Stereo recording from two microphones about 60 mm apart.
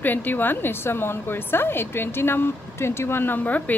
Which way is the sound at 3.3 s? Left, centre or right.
Left.